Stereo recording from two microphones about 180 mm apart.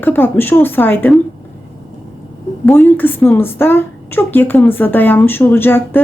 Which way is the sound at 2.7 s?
10° left (ahead or behind).